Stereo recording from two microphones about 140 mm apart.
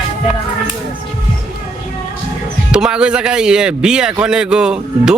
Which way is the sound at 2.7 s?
5° right (ahead or behind).